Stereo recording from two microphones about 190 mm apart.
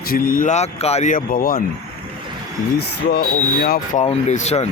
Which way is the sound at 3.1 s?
50° left (ahead or behind).